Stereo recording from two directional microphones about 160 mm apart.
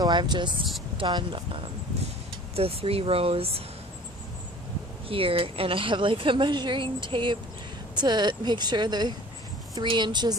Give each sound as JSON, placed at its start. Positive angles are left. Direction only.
{"t": 0.0, "sound": "a woman's voice", "side_deg": -25}
{"t": 5.0, "sound": "a woman's voice", "side_deg": -35}